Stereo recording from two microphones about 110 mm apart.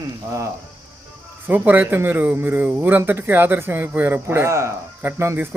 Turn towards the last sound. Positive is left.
turn(degrees=-25)  # may be behind; listen again after turning